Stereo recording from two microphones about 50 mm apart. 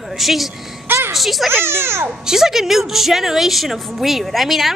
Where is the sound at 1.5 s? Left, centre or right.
Right.